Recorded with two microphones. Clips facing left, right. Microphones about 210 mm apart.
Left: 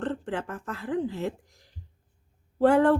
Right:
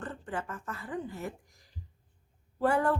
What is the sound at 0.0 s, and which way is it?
A woman's voice, 75° left (ahead or behind).